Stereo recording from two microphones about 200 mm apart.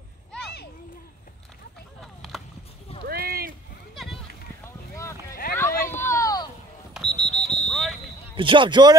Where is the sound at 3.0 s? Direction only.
50° right (ahead or behind).